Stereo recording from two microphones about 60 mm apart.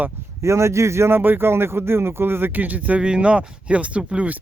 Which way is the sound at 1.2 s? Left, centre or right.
Right.